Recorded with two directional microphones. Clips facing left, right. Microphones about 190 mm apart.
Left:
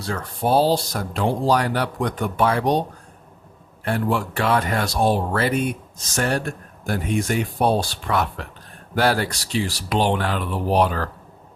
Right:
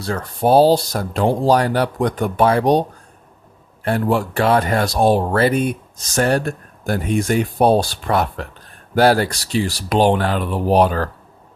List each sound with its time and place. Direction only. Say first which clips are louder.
0.0 s speech: right 5 dB; 40° right (ahead or behind)
3.8 s speech: right 4 dB; 40° right (ahead or behind)